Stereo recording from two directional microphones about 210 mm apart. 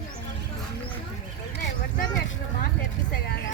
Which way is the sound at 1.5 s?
55° left (ahead or behind).